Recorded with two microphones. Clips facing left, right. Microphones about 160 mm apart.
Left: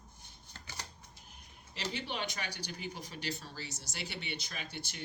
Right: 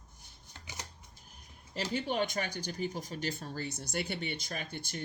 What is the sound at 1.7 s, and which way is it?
Speech, 45° right (ahead or behind).